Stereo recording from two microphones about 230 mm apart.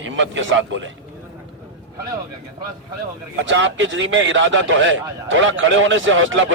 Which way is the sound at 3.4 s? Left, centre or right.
Right.